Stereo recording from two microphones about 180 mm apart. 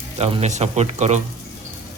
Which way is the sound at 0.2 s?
35° right (ahead or behind).